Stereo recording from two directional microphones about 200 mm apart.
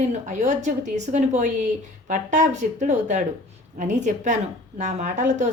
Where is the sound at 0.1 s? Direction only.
35° right (ahead or behind).